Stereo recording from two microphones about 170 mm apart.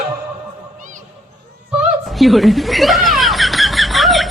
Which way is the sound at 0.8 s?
50° right (ahead or behind).